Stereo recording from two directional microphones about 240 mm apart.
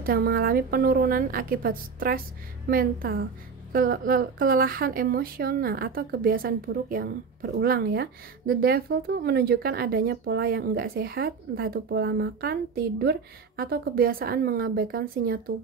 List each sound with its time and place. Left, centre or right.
0.0 s speech: right